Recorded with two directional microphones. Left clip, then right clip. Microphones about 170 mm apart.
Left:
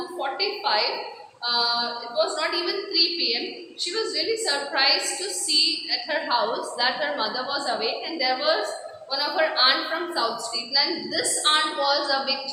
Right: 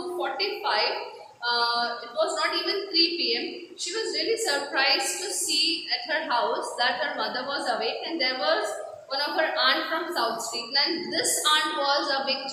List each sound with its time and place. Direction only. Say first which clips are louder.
0.2 s music: left 3 dB; 15° left (ahead or behind)
1.5 s a woman's voice: left 1 dB; 15° left (ahead or behind)